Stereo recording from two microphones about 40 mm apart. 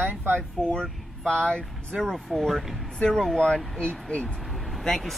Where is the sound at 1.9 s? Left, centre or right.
Centre.